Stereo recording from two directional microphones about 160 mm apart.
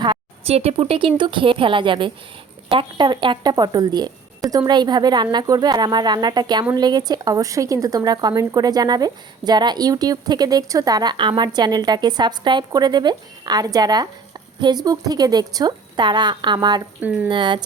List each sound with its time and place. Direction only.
0.0 s a woman's voice: 35° right (ahead or behind)